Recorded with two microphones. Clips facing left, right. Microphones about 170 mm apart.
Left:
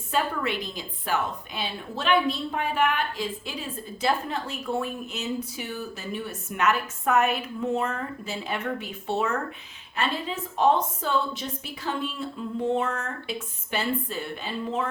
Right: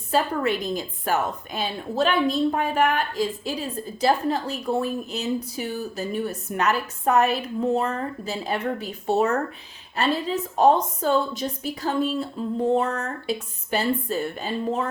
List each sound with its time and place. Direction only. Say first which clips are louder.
0.1 s a woman's voice: right 4 dB; 40° right (ahead or behind)